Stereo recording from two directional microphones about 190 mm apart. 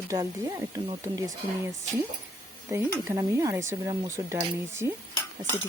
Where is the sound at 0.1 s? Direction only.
15° right (ahead or behind).